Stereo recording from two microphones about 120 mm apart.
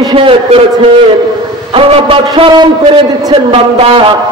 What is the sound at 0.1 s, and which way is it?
Speech, 45° right (ahead or behind).